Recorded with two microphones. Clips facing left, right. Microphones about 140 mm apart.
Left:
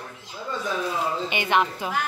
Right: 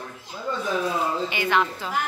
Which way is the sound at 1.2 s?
20° left (ahead or behind).